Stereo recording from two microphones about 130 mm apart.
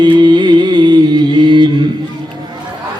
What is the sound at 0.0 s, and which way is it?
Music, 35° right (ahead or behind).